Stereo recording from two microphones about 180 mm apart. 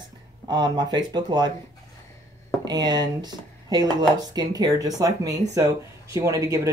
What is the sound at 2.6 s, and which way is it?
Speech, 25° right (ahead or behind).